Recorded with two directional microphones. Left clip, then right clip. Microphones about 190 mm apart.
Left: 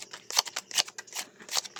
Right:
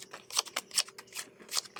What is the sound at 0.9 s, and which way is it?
Scissors, 10° left (ahead or behind).